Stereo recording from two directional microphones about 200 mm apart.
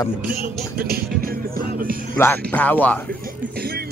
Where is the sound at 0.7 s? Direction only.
50° right (ahead or behind).